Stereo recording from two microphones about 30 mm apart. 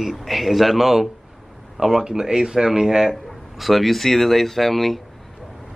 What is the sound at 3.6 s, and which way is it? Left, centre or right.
Speech, centre.